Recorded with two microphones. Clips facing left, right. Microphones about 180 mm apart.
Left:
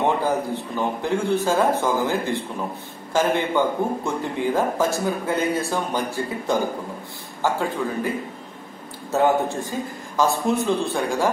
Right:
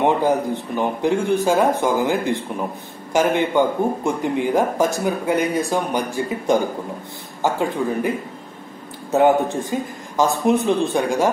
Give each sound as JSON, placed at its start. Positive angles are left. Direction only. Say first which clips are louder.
{"t": 0.7, "sound": "a man's voice", "louder": "right 4 dB", "side_deg": -15}
{"t": 9.1, "sound": "a man's voice", "louder": "right 4 dB", "side_deg": -20}